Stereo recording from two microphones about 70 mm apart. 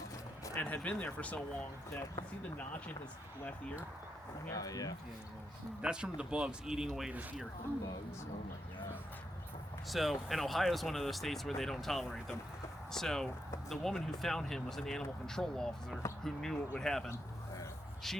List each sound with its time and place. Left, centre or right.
0.5 s speech: centre
2.6 s speech: left
4.5 s speech: left
5.8 s speech: centre
9.9 s speech: centre